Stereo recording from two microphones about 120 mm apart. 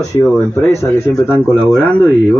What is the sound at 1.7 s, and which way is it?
Speech, 10° left (ahead or behind).